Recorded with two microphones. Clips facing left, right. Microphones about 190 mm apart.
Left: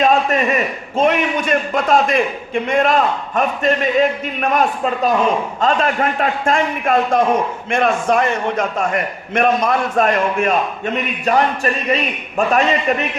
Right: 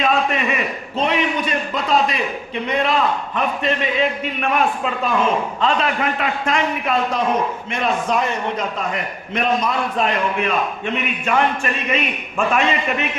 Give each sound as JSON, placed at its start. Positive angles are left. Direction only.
{"t": 0.0, "sound": "a man's voice", "side_deg": 45}